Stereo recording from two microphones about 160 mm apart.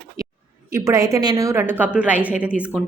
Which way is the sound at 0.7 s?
20° right (ahead or behind).